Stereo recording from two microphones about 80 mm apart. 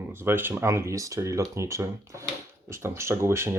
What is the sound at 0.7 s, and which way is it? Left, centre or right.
Speech, right.